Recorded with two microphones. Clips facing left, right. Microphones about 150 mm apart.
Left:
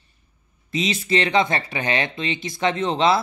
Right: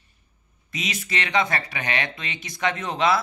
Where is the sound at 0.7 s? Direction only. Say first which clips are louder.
Left 8 dB; 30° left (ahead or behind).